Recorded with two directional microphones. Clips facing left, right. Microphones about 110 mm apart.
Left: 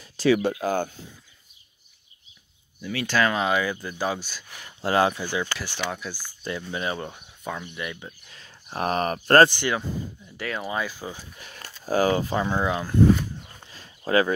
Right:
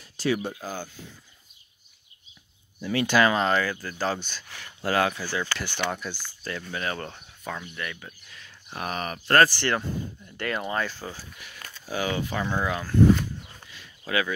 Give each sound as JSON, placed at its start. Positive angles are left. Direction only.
{"t": 0.3, "sound": "speech", "side_deg": 85}
{"t": 2.8, "sound": "speech", "side_deg": -35}
{"t": 3.1, "sound": "speech", "side_deg": -5}
{"t": 3.4, "sound": "speech", "side_deg": 15}
{"t": 5.6, "sound": "speech", "side_deg": 0}
{"t": 8.3, "sound": "a sound", "side_deg": 30}
{"t": 8.6, "sound": "speech", "side_deg": 40}
{"t": 9.5, "sound": "speech", "side_deg": 15}
{"t": 9.8, "sound": "speech", "side_deg": 5}
{"t": 11.3, "sound": "a sound", "side_deg": 35}
{"t": 11.8, "sound": "speech", "side_deg": 40}
{"t": 12.4, "sound": "speech", "side_deg": 20}
{"t": 13.7, "sound": "a sound", "side_deg": 35}